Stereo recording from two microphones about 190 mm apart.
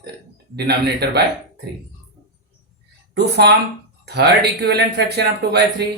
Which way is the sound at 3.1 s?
60° right (ahead or behind).